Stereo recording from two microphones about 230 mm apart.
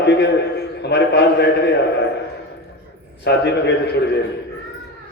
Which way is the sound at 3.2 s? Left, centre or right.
Left.